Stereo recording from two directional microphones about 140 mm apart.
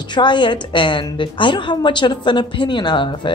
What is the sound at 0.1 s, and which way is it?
A woman's voice, 35° left (ahead or behind).